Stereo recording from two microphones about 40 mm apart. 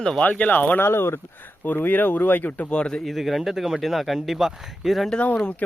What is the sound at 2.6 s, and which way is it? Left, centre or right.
Speech, left.